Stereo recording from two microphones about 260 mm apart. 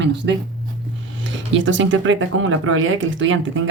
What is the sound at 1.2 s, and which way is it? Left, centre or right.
Speech, right.